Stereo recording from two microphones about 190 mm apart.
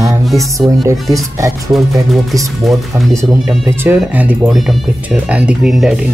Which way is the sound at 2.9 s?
10° right (ahead or behind).